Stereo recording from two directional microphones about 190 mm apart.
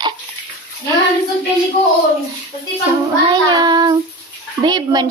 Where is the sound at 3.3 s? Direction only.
25° right (ahead or behind).